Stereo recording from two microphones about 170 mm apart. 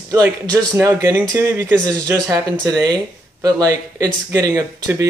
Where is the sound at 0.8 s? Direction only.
15° right (ahead or behind).